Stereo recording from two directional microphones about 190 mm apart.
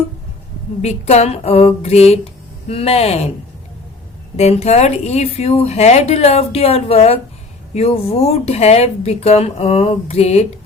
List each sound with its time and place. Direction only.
0.8 s speech: 35° left (ahead or behind)
4.4 s speech: 35° left (ahead or behind)